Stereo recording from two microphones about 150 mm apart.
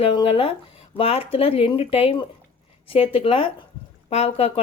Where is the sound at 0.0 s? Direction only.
40° left (ahead or behind).